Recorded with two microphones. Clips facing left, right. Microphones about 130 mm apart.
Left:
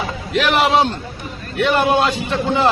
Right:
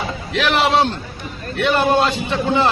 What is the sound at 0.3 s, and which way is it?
A man's voice, centre (ahead or behind).